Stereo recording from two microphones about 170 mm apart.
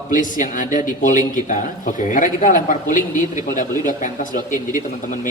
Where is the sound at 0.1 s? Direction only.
50° left (ahead or behind).